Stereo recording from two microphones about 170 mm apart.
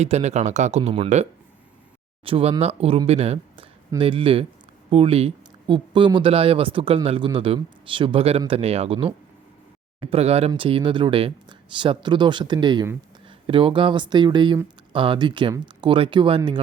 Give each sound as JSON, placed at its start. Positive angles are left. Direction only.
{"t": 0.0, "sound": "speech", "side_deg": -40}